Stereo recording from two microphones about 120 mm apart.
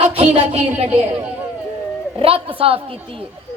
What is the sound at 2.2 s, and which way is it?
Speech, 50° right (ahead or behind).